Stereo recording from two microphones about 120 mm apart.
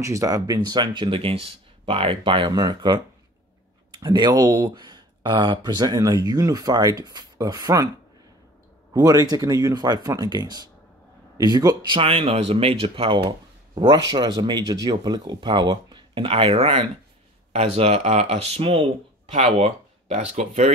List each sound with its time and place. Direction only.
0.0 s speech: 25° right (ahead or behind)
8.9 s speech: 30° right (ahead or behind)
12.0 s speech: 50° right (ahead or behind)
13.7 s speech: 35° right (ahead or behind)
16.3 s speech: 55° right (ahead or behind); by 20.7 s 70° right (ahead or behind)